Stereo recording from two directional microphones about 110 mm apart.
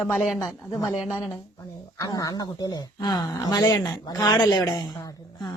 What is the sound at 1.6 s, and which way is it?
Speech, 30° left (ahead or behind).